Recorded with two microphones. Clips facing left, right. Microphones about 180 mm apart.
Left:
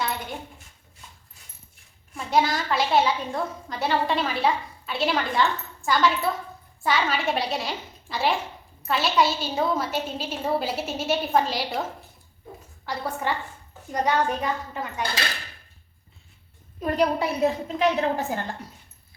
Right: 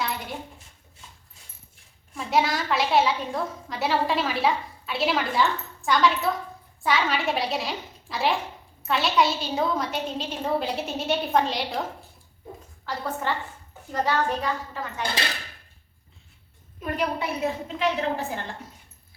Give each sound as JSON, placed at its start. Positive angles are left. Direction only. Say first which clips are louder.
{"t": 0.0, "sound": "a sound", "louder": "left 1 dB", "side_deg": 0}
{"t": 2.1, "sound": "a woman's voice", "louder": "left 1 dB", "side_deg": 0}
{"t": 12.8, "sound": "a woman's voice", "louder": "left 1 dB", "side_deg": 10}
{"t": 16.8, "sound": "a woman's voice", "louder": "left 5 dB", "side_deg": 35}